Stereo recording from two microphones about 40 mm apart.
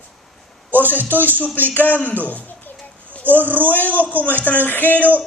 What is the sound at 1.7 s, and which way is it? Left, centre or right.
Speech, left.